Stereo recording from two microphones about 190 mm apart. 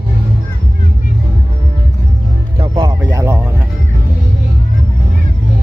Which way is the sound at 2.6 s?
20° right (ahead or behind).